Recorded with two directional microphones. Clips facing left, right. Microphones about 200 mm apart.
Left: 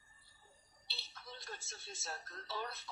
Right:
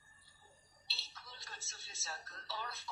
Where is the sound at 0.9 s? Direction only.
55° left (ahead or behind).